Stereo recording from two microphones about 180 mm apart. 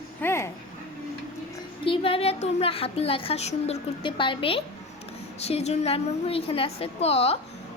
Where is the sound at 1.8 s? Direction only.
30° left (ahead or behind).